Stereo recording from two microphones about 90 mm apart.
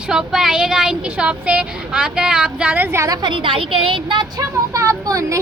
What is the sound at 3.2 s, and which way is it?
A woman's voice, 65° right (ahead or behind).